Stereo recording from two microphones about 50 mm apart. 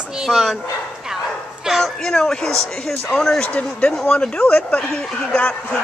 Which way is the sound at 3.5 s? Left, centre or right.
Left.